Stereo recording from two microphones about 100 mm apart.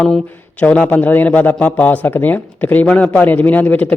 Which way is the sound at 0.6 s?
15° left (ahead or behind).